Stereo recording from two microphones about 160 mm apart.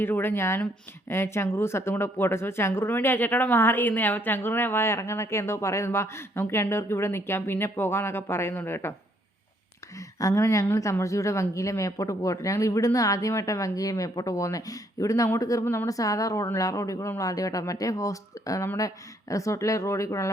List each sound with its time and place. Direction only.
0.0 s speech: 15° left (ahead or behind)
10.2 s speech: 20° left (ahead or behind)